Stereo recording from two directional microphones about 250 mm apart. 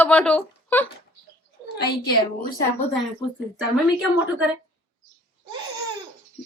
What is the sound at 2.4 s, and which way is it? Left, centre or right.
Speech, left.